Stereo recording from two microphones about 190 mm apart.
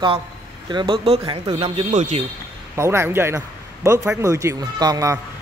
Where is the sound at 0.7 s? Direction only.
25° right (ahead or behind).